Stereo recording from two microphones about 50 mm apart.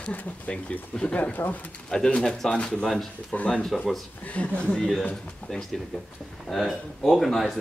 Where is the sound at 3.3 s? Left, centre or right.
Left.